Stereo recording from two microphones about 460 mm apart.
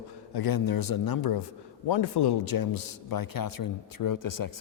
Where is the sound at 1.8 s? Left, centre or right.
Left.